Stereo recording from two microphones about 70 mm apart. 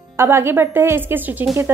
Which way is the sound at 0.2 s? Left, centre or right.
Right.